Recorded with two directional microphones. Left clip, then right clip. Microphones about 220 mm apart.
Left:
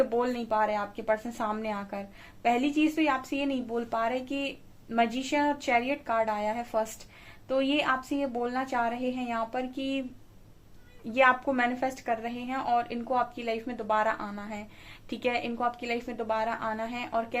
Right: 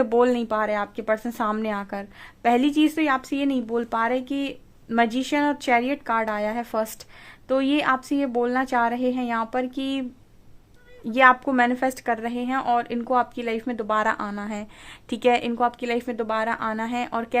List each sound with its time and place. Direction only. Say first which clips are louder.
0.0 s a woman's voice: right 8 dB; 50° right (ahead or behind)
11.1 s a woman's voice: right 6 dB; 45° right (ahead or behind)